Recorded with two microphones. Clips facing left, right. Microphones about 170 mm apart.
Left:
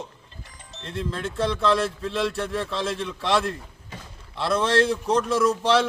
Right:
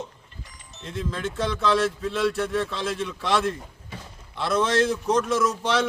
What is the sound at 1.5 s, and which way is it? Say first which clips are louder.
A man's voice: even; centre (ahead or behind).